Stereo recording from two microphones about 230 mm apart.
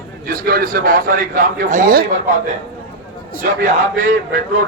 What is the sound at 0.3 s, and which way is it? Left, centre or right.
A man's voice, right.